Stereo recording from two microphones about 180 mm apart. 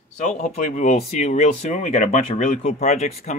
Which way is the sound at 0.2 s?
40° left (ahead or behind).